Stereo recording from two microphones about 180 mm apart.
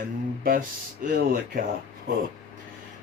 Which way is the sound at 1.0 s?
55° right (ahead or behind).